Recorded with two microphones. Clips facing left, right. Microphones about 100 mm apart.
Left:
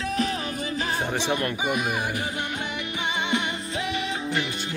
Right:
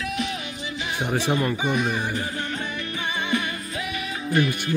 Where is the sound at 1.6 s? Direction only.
10° left (ahead or behind).